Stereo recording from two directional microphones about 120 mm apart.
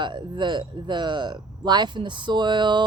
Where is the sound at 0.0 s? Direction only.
40° right (ahead or behind).